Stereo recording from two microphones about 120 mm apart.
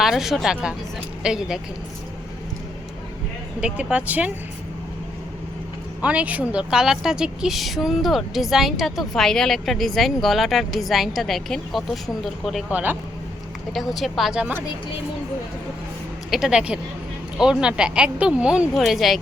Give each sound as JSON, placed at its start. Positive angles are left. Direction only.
{"t": 0.0, "sound": "a woman's voice", "side_deg": -5}
{"t": 3.6, "sound": "speech", "side_deg": -10}
{"t": 6.0, "sound": "a woman's voice", "side_deg": -10}
{"t": 12.7, "sound": "speech", "side_deg": -15}
{"t": 13.7, "sound": "a woman's voice", "side_deg": 0}
{"t": 16.3, "sound": "speech", "side_deg": -5}